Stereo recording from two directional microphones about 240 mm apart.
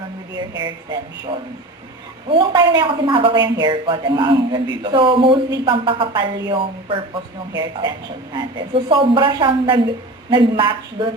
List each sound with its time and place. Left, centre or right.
0.6 s a woman's voice: centre